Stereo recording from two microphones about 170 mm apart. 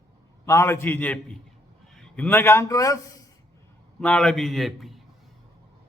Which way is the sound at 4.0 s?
5° left (ahead or behind).